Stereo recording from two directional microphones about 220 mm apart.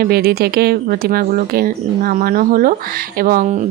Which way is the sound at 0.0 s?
45° right (ahead or behind).